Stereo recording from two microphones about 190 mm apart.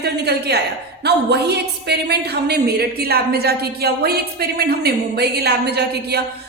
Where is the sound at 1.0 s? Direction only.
60° right (ahead or behind).